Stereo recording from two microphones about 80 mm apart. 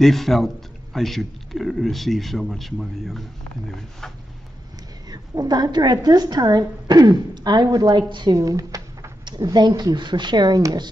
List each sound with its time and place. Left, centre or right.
0.0 s a man's voice: centre
5.1 s a woman's voice: right
8.4 s a sound: right
9.2 s a woman's voice: right